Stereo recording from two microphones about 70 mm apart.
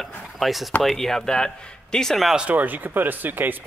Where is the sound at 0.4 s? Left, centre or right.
Centre.